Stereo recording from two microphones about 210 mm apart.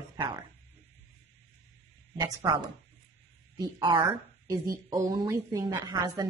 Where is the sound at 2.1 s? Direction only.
20° right (ahead or behind).